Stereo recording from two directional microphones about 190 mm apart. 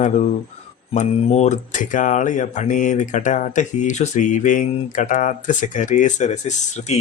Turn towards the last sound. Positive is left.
turn(degrees=35)  # may be behind; listen again after turning